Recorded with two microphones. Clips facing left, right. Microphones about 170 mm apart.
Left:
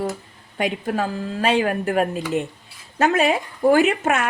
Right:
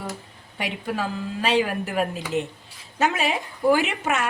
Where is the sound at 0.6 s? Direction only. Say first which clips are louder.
Left 5 dB; 50° left (ahead or behind).